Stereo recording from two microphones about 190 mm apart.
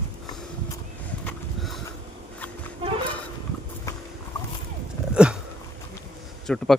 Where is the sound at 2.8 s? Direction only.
30° right (ahead or behind).